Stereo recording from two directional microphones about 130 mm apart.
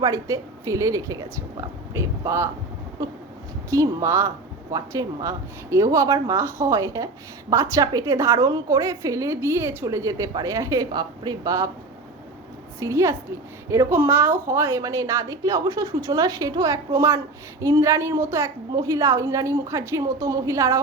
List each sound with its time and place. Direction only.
0.0 s a woman's voice: 25° right (ahead or behind)
12.8 s a woman's voice: 25° right (ahead or behind)